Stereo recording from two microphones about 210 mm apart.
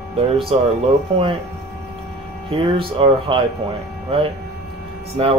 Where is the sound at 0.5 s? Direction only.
25° right (ahead or behind).